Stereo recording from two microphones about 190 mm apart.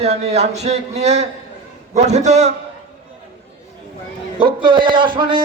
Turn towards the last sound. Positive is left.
turn(degrees=-25)  # may be behind; listen again after turning